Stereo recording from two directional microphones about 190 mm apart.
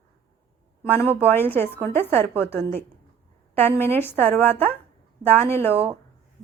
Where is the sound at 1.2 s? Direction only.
10° left (ahead or behind).